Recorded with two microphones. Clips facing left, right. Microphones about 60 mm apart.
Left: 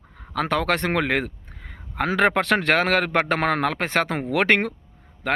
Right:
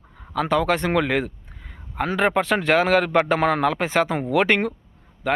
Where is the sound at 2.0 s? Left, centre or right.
Left.